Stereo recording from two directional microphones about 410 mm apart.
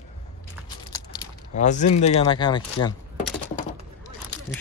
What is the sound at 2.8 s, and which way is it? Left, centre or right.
Speech, left.